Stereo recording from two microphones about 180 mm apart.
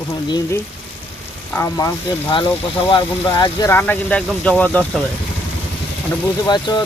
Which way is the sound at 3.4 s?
20° left (ahead or behind).